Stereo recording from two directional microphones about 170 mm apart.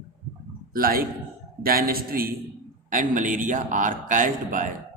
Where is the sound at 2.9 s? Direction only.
50° right (ahead or behind).